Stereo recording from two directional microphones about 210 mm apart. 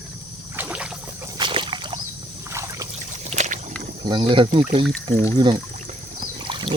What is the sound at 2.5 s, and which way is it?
Boat, 15° right (ahead or behind).